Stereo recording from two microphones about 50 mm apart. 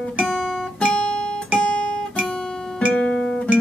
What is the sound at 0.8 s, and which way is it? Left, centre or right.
Guitar, left.